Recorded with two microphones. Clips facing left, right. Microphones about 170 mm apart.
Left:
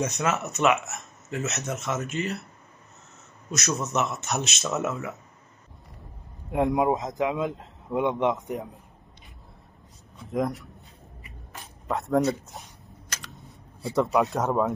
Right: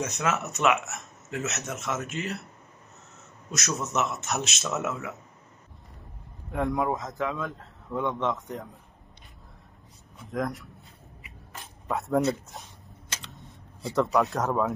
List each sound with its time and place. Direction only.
0.0 s speech: centre (ahead or behind)
3.5 s speech: centre (ahead or behind)
6.5 s a man's voice: 20° left (ahead or behind)
10.1 s speech: centre (ahead or behind)
13.3 s a sound: centre (ahead or behind)
14.3 s speech: centre (ahead or behind)